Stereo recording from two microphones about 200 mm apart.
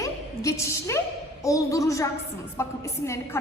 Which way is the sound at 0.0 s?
15° left (ahead or behind).